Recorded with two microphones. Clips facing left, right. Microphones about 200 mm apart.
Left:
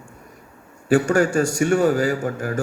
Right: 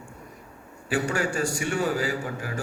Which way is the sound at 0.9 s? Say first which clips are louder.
Left 9 dB; 45° left (ahead or behind).